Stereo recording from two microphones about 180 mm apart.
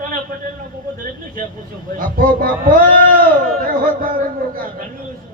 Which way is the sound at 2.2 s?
50° right (ahead or behind).